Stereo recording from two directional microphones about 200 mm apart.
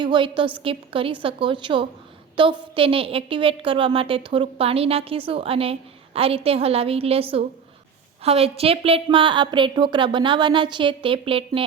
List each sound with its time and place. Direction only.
0.0 s a woman's voice: 25° right (ahead or behind)